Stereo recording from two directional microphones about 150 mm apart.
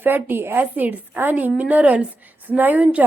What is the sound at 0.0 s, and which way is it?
A woman's voice, 15° right (ahead or behind).